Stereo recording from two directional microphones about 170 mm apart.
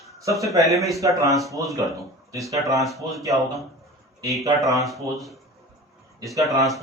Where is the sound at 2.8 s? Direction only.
Centre (ahead or behind).